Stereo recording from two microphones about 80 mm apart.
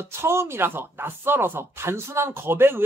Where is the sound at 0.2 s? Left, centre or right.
Right.